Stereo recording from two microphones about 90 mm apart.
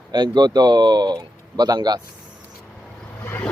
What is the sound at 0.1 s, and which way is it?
Speech, 50° right (ahead or behind).